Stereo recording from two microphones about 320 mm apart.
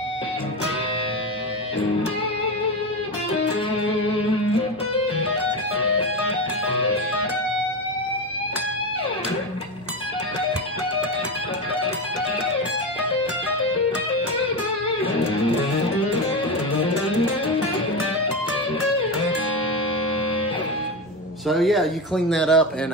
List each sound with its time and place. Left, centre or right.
21.5 s speech: centre